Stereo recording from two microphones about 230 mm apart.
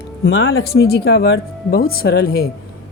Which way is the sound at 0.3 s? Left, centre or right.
Left.